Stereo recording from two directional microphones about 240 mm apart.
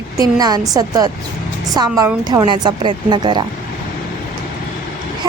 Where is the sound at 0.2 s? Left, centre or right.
Centre.